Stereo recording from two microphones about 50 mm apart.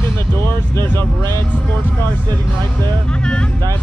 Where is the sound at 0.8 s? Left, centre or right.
Left.